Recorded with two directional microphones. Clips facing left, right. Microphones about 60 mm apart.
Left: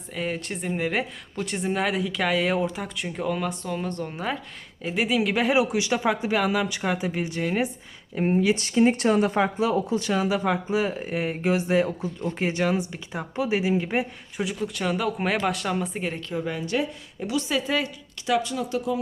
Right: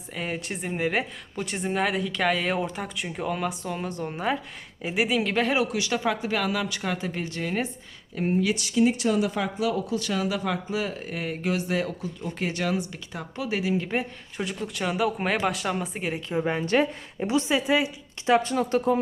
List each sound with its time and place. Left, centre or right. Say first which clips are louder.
0.1 s speech: left 2 dB; centre
8.1 s speech: left 3 dB; left
8.5 s speech: left 2 dB; left
9.4 s speech: left 4 dB; left
14.3 s speech: left 2 dB; centre
16.3 s speech: right 5 dB; right
17.2 s a woman's voice: right 2 dB; right
17.7 s a woman's voice: right 3 dB; centre
18.3 s speech: right 3 dB; right